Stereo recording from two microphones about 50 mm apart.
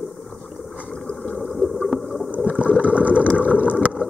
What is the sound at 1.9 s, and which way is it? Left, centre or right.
Boat, centre.